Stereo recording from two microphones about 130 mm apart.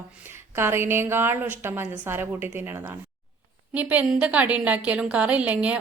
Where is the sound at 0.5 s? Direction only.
20° right (ahead or behind).